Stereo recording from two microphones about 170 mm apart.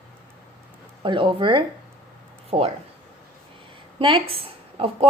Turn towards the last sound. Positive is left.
turn(degrees=-35)  # may be behind; listen again after turning